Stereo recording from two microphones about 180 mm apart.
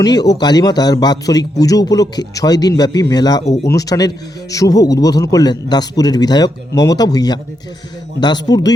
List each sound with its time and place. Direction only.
0.0 s a man's voice: 20° left (ahead or behind)
3.4 s speech: 40° left (ahead or behind)
3.7 s a man's voice: 20° left (ahead or behind)